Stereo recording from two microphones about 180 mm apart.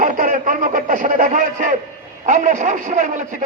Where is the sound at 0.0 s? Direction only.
50° right (ahead or behind).